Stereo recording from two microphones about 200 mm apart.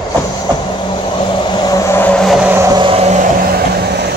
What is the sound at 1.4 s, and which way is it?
Vehicle, 20° left (ahead or behind).